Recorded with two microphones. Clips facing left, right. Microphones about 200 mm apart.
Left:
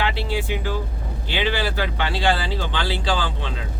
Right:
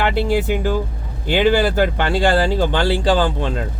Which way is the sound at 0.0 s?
50° right (ahead or behind).